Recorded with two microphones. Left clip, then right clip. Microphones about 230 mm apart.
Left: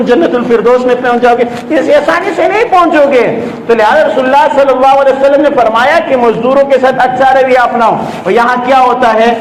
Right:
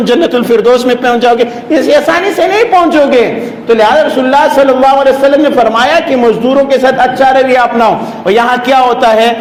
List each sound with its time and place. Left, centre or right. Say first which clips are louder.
0.1 s a man's voice: even; right